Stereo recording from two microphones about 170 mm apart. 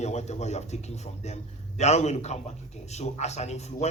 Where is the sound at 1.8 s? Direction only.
40° left (ahead or behind).